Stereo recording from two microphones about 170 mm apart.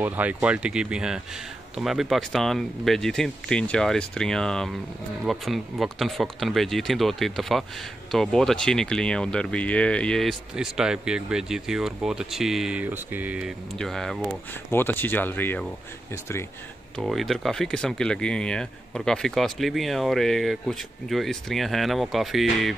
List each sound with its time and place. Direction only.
0.0 s speech: 10° right (ahead or behind); by 16.4 s 15° left (ahead or behind)
16.9 s speech: centre (ahead or behind)